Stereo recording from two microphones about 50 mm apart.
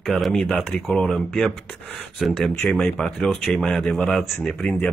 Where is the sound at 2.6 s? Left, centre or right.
Centre.